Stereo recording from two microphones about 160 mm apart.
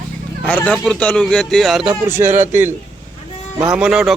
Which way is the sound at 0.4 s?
10° left (ahead or behind).